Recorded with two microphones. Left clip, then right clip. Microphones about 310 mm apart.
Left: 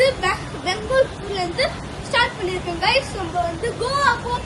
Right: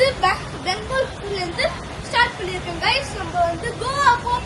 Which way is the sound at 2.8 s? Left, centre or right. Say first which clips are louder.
Left 2 dB; centre.